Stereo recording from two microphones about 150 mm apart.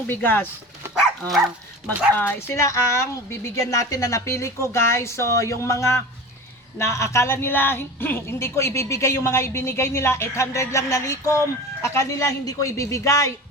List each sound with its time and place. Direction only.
0.1 s speech: 10° left (ahead or behind)
2.1 s a woman's voice: 15° left (ahead or behind)